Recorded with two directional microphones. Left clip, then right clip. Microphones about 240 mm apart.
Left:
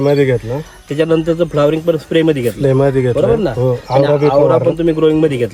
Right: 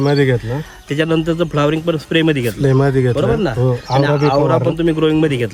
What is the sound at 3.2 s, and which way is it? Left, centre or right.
Speech, centre.